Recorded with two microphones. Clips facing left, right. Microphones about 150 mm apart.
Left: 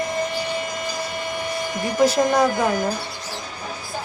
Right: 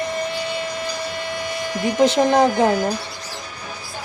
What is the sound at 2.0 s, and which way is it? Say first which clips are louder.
Speech: right 2 dB; 25° right (ahead or behind).